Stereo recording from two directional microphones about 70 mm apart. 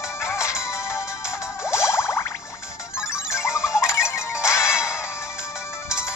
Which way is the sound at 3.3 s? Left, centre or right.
Left.